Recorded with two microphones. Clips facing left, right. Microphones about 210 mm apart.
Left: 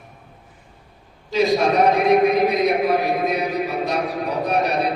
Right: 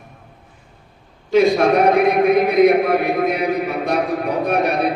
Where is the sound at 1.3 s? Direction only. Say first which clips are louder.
Right 4 dB; 55° right (ahead or behind).